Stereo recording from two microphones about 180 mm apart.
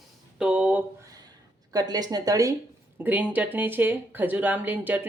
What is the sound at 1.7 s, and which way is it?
Speech, 20° right (ahead or behind).